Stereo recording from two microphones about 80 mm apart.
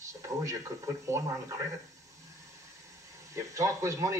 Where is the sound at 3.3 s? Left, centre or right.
Right.